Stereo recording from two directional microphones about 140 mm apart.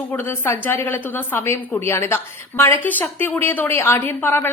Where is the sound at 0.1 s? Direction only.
15° left (ahead or behind).